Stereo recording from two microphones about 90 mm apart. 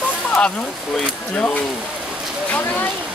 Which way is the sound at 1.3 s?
15° left (ahead or behind).